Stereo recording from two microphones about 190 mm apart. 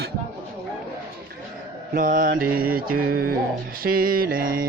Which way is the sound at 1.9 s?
45° right (ahead or behind).